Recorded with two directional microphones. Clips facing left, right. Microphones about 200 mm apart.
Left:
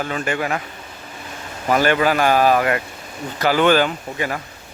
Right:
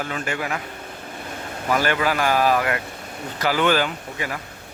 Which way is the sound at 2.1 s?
60° left (ahead or behind).